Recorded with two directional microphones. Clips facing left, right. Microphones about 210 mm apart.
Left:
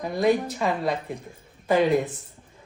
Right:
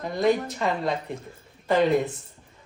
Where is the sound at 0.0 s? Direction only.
5° left (ahead or behind).